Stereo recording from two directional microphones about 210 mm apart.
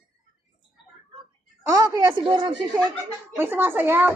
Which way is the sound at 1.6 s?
15° right (ahead or behind).